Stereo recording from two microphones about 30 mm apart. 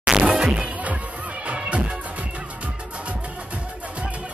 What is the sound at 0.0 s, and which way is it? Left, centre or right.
Music, right.